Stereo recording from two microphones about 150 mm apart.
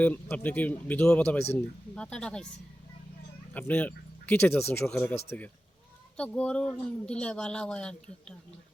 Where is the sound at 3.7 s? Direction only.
10° left (ahead or behind).